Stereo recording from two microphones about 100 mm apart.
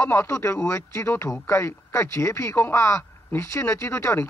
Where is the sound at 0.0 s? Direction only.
30° left (ahead or behind).